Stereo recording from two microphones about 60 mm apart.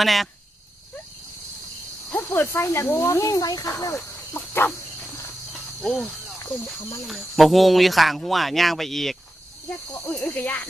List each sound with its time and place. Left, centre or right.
0.0 s speech: centre
2.1 s speech: left
2.6 s speech: left
4.4 s cricket: left
5.8 s speech: centre
7.1 s speech: centre
9.6 s speech: left